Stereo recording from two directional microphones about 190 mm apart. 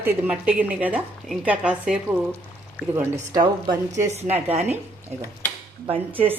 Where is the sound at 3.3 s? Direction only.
25° right (ahead or behind).